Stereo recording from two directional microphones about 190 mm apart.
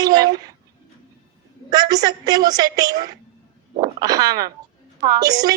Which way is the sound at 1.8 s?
20° right (ahead or behind).